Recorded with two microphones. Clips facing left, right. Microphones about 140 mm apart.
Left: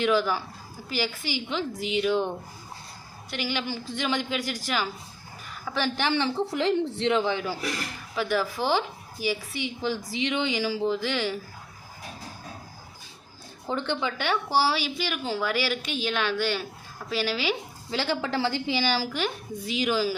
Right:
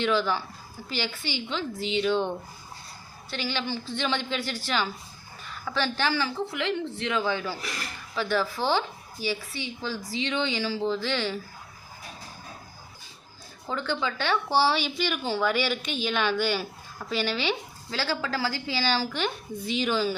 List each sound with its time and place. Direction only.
0.0 s a woman's voice: 10° left (ahead or behind)
13.7 s a woman's voice: 20° left (ahead or behind); by 17.5 s 5° left (ahead or behind)
17.9 s a woman's voice: 20° left (ahead or behind)